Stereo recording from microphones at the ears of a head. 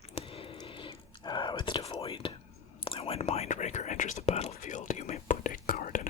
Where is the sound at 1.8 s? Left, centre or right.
Left.